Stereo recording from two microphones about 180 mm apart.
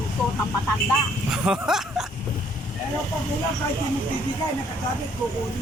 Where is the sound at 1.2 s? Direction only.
5° right (ahead or behind).